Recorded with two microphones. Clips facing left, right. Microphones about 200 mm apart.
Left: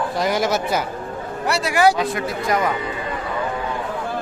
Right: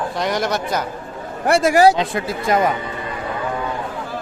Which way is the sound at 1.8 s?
25° right (ahead or behind).